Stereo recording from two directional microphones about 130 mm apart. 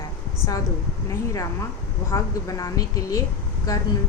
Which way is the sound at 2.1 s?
25° left (ahead or behind).